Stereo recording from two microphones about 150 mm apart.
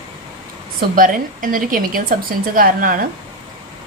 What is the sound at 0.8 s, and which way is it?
A woman's voice, 65° right (ahead or behind).